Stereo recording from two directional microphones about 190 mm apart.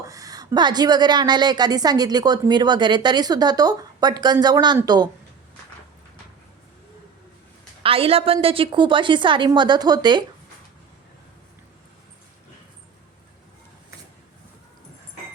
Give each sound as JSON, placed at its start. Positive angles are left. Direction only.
{"t": 0.0, "sound": "a woman's voice", "side_deg": -20}
{"t": 7.8, "sound": "a woman's voice", "side_deg": -30}